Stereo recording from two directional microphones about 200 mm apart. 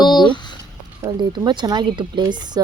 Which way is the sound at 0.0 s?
20° left (ahead or behind).